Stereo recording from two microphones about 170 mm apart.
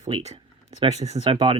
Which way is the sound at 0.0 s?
40° right (ahead or behind).